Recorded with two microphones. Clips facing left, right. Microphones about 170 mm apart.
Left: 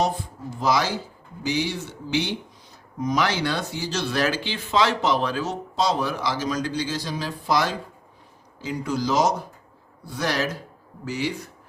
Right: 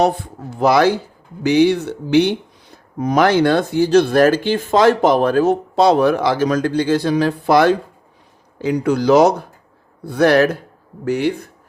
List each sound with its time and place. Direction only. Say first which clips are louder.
0.0 s speech: right 8 dB; 65° right (ahead or behind)